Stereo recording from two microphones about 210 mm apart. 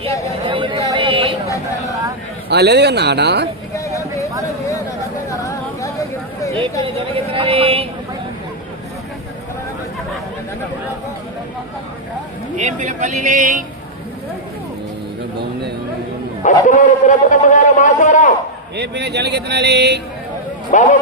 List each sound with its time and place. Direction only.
0.4 s chatter: 25° right (ahead or behind)
0.9 s a sound: 25° right (ahead or behind)
2.5 s speech: 55° right (ahead or behind)
3.8 s vehicle: 15° left (ahead or behind)
5.3 s a sound: 15° left (ahead or behind)
6.8 s speech: 25° right (ahead or behind)
12.5 s speech: 35° right (ahead or behind)
16.4 s a man's voice: 35° left (ahead or behind)
18.8 s speech: 55° right (ahead or behind)
20.7 s a man's voice: 40° left (ahead or behind)